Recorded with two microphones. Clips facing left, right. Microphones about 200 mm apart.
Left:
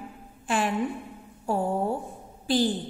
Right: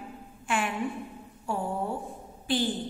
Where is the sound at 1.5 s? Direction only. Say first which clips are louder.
Left 5 dB; 40° left (ahead or behind).